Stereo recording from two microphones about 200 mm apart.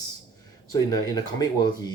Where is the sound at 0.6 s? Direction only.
20° left (ahead or behind).